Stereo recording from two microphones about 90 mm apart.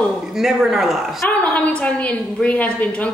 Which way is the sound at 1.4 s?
15° left (ahead or behind).